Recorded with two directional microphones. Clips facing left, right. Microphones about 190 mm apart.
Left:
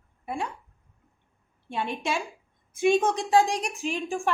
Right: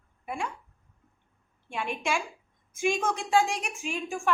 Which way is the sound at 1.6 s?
35° left (ahead or behind).